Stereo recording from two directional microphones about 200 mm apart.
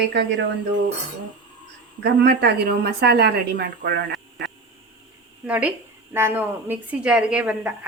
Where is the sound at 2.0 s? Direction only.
55° right (ahead or behind).